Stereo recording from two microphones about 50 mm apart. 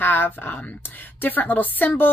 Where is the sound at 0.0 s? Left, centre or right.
Left.